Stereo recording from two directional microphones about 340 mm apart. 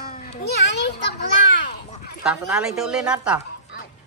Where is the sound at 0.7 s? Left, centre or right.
Left.